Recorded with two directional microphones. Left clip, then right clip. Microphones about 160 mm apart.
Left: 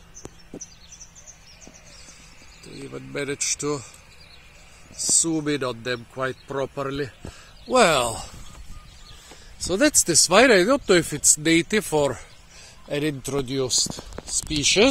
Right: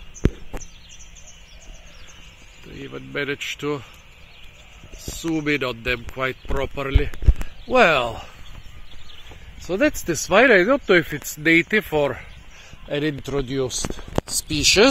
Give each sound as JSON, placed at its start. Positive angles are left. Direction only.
{"t": 3.1, "sound": "speech", "side_deg": 15}
{"t": 5.2, "sound": "speech", "side_deg": 15}
{"t": 5.5, "sound": "a man's voice", "side_deg": 0}
{"t": 7.7, "sound": "speech", "side_deg": 15}
{"t": 9.7, "sound": "speech", "side_deg": 35}
{"t": 12.8, "sound": "a man's voice", "side_deg": 5}